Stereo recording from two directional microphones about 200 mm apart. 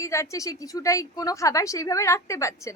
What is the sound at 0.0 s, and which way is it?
A woman's voice, 15° left (ahead or behind).